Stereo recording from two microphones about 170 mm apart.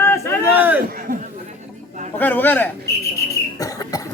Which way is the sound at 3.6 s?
20° left (ahead or behind).